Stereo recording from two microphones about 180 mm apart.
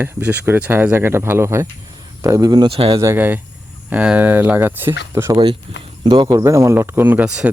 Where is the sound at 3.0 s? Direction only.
10° right (ahead or behind).